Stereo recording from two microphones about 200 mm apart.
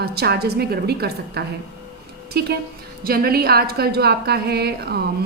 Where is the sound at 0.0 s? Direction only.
55° right (ahead or behind).